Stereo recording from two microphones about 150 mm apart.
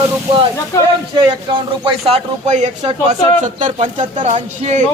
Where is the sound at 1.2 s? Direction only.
30° right (ahead or behind).